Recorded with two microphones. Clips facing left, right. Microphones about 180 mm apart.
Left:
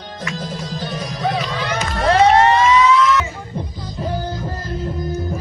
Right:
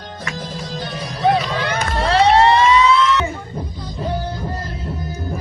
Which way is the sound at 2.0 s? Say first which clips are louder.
Left 1 dB; 35° right (ahead or behind).